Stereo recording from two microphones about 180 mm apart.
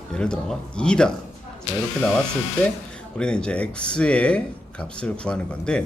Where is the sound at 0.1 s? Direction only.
5° left (ahead or behind).